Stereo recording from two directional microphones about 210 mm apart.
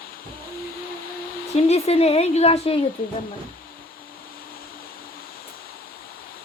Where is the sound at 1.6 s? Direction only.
30° left (ahead or behind).